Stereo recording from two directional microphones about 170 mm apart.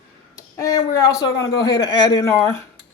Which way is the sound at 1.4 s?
25° left (ahead or behind).